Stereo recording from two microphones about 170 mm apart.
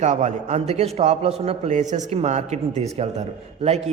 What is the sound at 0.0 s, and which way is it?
A man's voice, 45° right (ahead or behind).